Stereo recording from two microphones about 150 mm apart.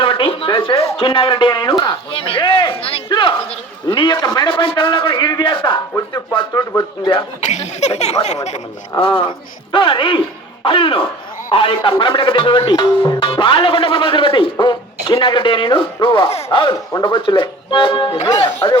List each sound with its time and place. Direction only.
0.0 s speech: 35° left (ahead or behind)
7.4 s speech: 50° left (ahead or behind); by 18.8 s 30° left (ahead or behind)